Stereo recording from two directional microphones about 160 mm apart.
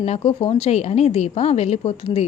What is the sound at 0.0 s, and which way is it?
A woman's voice, 40° left (ahead or behind).